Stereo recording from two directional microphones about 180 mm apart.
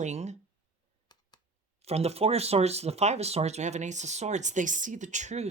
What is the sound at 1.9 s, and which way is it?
Speech, 35° right (ahead or behind).